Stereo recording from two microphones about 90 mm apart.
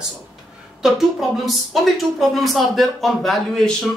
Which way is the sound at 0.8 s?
Centre (ahead or behind).